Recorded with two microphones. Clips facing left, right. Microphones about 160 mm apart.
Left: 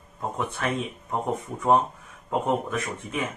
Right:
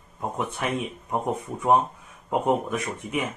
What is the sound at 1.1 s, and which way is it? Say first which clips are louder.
Speech: right 1 dB; 15° right (ahead or behind).